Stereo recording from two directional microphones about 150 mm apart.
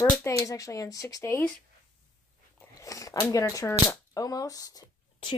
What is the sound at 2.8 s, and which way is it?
Speech, 20° left (ahead or behind).